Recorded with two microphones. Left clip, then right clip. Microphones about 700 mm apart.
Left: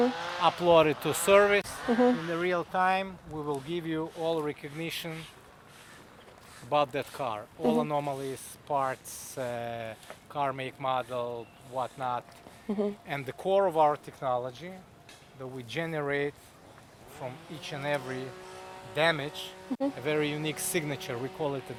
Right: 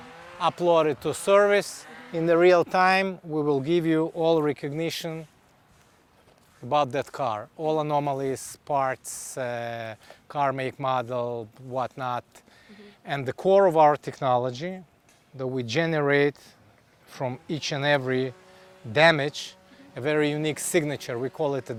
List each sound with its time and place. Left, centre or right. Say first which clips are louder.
0.3 s speech: right 4 dB; right
2.3 s speech: right 11 dB; right
6.7 s speech: right 4 dB; right
9.3 s speech: right 4 dB; right
10.2 s speech: right 6 dB; right
13.1 s speech: right 12 dB; right
15.4 s speech: right 9 dB; right
17.2 s speech: right 10 dB; right
18.9 s speech: right 8 dB; right
20.1 s speech: right 8 dB; right